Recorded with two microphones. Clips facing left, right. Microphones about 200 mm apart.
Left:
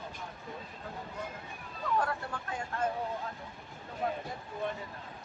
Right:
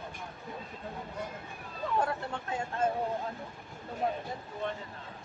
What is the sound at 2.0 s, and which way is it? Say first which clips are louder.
Speech: right 2 dB; 25° right (ahead or behind).